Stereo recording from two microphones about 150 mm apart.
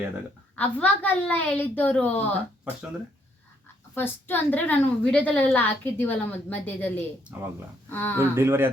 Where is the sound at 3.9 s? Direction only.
15° left (ahead or behind).